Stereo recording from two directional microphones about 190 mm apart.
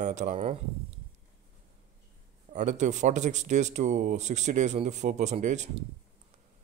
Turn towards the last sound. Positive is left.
turn(degrees=-40)  # may be behind; listen again after turning